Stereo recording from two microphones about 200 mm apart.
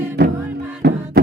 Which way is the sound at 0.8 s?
60° right (ahead or behind).